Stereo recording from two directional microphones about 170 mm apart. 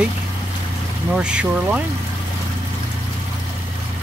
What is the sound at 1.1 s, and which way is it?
Speech, 5° right (ahead or behind).